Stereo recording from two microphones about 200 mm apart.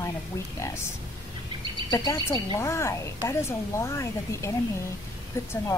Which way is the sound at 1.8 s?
20° left (ahead or behind).